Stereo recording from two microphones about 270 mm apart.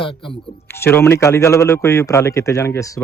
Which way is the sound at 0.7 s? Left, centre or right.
Centre.